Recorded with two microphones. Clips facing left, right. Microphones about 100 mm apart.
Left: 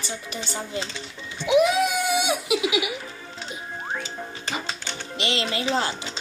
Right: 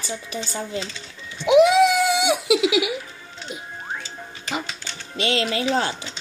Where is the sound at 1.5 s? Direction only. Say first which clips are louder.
Right 5 dB; 90° right.